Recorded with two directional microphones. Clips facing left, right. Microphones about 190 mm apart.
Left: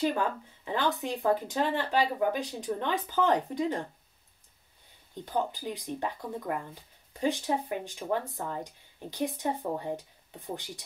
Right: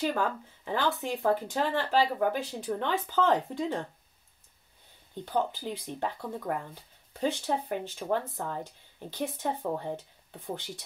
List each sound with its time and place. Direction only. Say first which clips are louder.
0.7 s speech: even; 15° left (ahead or behind)
5.1 s speech: right 1 dB; 15° left (ahead or behind)